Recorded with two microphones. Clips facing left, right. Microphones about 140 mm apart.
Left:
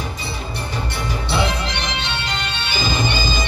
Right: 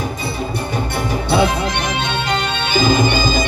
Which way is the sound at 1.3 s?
50° right (ahead or behind).